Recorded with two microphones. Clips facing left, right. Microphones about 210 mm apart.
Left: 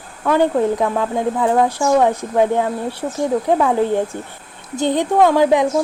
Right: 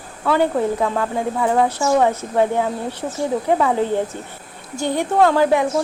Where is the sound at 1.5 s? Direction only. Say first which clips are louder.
Left 1 dB; centre (ahead or behind).